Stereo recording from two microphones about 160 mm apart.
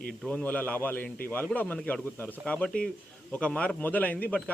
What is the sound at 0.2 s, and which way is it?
A man's voice, 5° left (ahead or behind).